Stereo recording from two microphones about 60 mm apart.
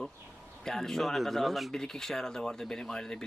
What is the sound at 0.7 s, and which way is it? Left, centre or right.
Speech, centre.